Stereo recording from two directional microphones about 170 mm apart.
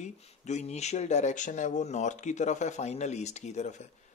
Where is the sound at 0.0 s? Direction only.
45° left (ahead or behind).